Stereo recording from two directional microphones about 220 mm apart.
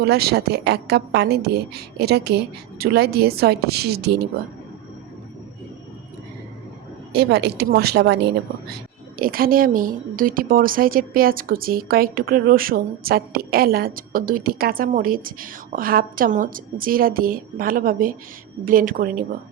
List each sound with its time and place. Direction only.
0.0 s a woman's voice: 45° right (ahead or behind)
7.1 s a woman's voice: 50° right (ahead or behind)